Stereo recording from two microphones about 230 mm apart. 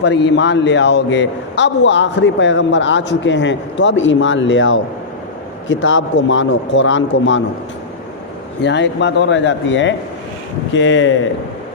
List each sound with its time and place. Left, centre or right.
0.0 s a man's voice: left
8.6 s a man's voice: left